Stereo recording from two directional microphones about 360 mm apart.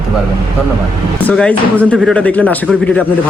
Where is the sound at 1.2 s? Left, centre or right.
Centre.